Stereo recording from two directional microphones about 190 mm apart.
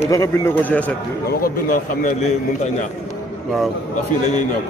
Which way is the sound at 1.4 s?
50° left (ahead or behind).